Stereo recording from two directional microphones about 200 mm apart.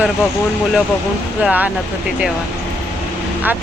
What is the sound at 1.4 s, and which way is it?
Speech, 5° right (ahead or behind).